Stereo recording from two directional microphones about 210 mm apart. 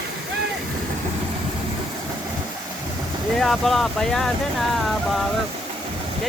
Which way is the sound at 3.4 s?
Centre (ahead or behind).